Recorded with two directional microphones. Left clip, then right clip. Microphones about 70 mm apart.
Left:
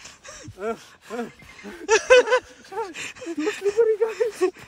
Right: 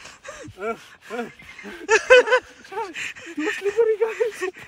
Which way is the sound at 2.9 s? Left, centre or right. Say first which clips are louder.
Right 1 dB; left.